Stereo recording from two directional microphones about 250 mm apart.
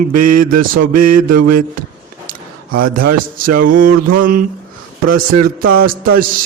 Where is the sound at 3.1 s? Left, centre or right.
Right.